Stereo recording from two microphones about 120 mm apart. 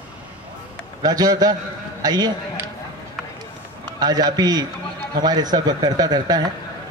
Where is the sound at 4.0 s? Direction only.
35° right (ahead or behind).